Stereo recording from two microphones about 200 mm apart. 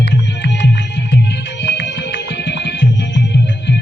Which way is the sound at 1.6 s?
60° left (ahead or behind).